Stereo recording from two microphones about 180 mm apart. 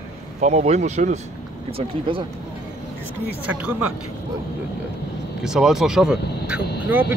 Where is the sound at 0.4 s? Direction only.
40° right (ahead or behind).